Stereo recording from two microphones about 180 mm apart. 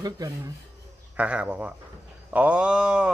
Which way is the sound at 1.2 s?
10° right (ahead or behind).